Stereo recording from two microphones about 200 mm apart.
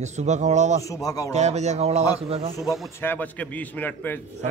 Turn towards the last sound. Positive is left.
turn(degrees=10)  # may be behind; listen again after turning